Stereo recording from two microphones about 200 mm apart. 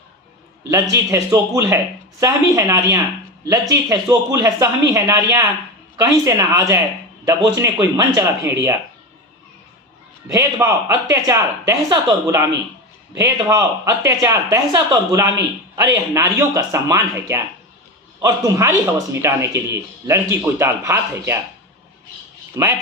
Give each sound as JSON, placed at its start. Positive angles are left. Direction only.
{"t": 1.1, "sound": "speech", "side_deg": -15}
{"t": 10.2, "sound": "speech", "side_deg": -15}
{"t": 22.5, "sound": "speech", "side_deg": -15}